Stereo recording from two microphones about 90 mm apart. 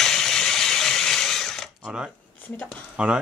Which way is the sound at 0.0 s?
5° left (ahead or behind).